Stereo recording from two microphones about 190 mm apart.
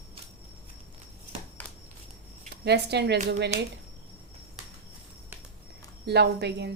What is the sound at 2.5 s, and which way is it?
Speech, 60° right (ahead or behind).